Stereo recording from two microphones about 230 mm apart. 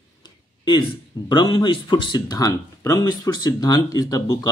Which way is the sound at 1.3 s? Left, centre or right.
Centre.